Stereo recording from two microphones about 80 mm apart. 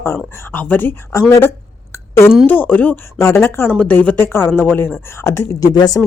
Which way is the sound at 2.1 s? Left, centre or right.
Left.